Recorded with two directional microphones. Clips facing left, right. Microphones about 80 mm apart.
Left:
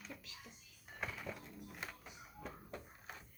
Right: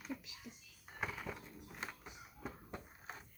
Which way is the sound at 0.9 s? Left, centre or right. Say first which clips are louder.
Right 2 dB; centre.